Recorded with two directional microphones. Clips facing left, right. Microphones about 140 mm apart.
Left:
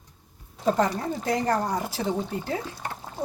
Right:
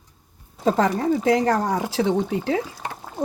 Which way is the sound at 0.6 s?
90° right.